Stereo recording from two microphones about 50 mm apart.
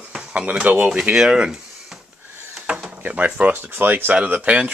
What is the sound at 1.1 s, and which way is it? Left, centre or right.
Speech, centre.